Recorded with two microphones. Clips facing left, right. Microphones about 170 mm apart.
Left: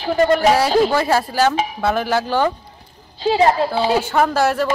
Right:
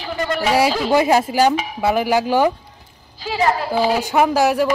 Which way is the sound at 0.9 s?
15° right (ahead or behind).